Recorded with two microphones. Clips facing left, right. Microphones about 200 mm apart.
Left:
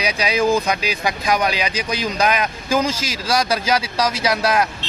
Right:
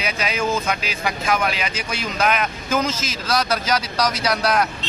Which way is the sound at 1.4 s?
35° left (ahead or behind).